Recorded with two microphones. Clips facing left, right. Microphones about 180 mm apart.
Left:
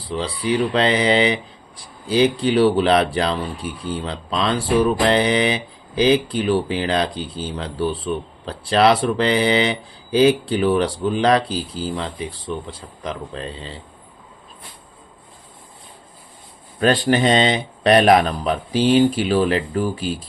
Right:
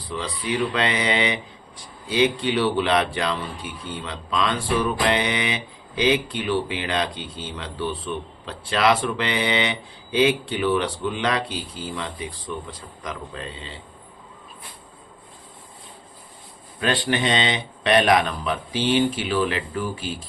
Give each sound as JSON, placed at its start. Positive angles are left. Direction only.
{"t": 0.1, "sound": "speech", "side_deg": 30}
{"t": 16.8, "sound": "speech", "side_deg": 40}